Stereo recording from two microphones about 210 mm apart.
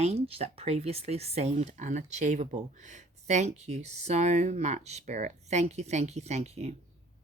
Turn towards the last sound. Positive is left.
turn(degrees=-30)  # may be behind; listen again after turning